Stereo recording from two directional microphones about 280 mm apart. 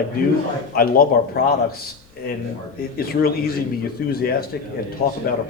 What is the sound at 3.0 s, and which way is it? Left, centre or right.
Speech, left.